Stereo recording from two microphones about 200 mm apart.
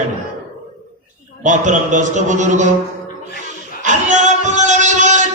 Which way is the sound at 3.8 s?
40° right (ahead or behind).